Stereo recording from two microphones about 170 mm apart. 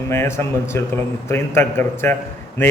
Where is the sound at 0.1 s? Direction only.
15° left (ahead or behind).